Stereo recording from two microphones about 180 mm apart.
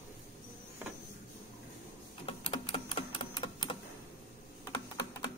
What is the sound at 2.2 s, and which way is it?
Typewriter, 30° left (ahead or behind).